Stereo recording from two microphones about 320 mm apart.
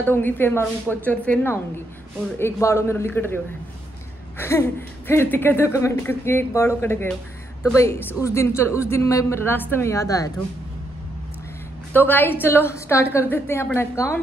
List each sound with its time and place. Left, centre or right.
0.0 s a woman's voice: centre
4.4 s speech: centre
11.9 s speech: centre